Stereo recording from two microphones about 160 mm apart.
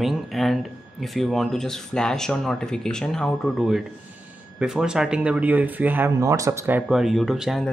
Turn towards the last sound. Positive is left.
turn(degrees=0)  # may be behind; listen again after turning